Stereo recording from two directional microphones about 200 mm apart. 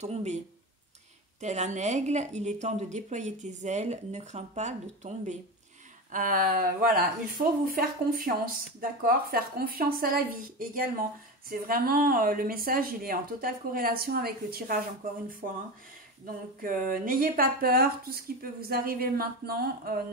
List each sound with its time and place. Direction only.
0.0 s a woman's voice: 35° right (ahead or behind)
1.4 s a woman's voice: 35° right (ahead or behind)
16.3 s a woman's voice: 45° right (ahead or behind)